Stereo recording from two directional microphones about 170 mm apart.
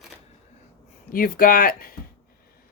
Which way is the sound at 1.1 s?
55° left (ahead or behind).